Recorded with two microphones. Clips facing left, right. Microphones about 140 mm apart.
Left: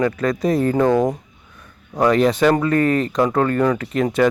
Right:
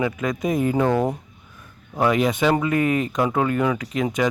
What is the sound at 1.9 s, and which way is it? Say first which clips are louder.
Speech: left 4 dB; 5° right (ahead or behind).